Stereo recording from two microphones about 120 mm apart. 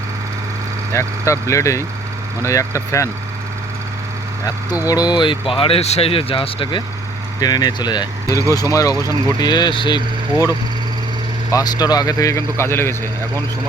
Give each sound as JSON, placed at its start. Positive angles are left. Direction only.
{"t": 0.9, "sound": "speech", "side_deg": 25}
{"t": 4.9, "sound": "speech", "side_deg": 35}
{"t": 7.3, "sound": "speech", "side_deg": 35}
{"t": 11.5, "sound": "speech", "side_deg": 35}